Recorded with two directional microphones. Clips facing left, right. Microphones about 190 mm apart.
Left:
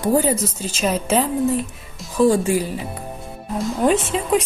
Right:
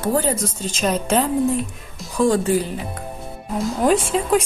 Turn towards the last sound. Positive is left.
turn(degrees=0)  # may be behind; listen again after turning